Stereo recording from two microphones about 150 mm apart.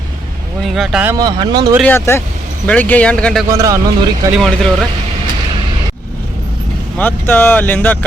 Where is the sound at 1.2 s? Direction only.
30° right (ahead or behind).